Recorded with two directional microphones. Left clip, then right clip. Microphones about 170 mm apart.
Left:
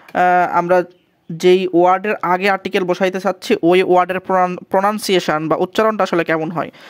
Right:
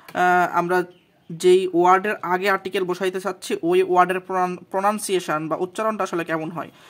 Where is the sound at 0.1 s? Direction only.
50° left (ahead or behind).